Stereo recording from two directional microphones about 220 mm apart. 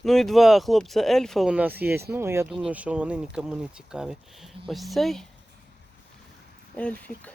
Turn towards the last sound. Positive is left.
turn(degrees=5)  # may be behind; listen again after turning